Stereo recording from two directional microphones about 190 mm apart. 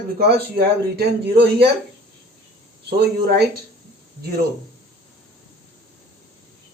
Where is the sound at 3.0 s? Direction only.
55° right (ahead or behind).